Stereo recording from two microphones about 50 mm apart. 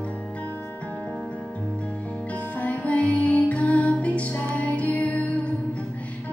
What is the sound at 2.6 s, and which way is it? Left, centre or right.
Music, left.